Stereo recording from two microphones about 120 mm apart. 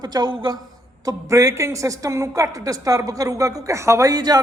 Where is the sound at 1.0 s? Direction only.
25° right (ahead or behind).